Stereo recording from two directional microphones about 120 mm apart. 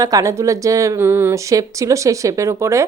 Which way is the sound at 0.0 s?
30° right (ahead or behind).